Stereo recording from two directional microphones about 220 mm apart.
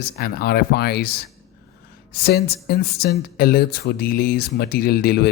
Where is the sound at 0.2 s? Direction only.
45° left (ahead or behind).